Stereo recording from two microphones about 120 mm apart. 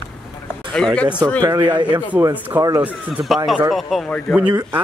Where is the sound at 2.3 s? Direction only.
15° right (ahead or behind); by 4.4 s centre (ahead or behind).